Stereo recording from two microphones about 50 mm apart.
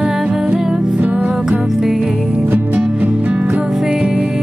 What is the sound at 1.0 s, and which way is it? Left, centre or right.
Music, right.